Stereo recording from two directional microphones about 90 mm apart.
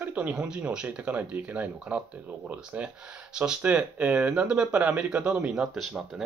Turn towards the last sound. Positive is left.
turn(degrees=0)  # may be behind; listen again after turning